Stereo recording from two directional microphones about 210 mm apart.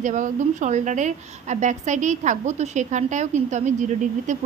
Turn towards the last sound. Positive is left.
turn(degrees=-35)  # may be behind; listen again after turning